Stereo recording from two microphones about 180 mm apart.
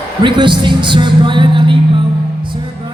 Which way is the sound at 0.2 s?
25° right (ahead or behind).